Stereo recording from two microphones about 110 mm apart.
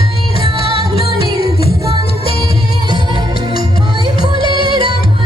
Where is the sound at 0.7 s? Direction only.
55° left (ahead or behind).